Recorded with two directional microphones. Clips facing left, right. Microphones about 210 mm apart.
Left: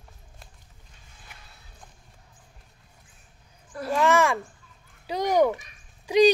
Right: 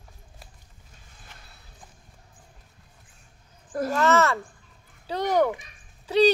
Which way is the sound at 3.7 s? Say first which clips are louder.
Right 3 dB; 45° right (ahead or behind).